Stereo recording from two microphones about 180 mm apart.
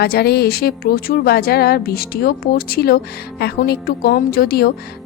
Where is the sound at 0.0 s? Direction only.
60° left (ahead or behind).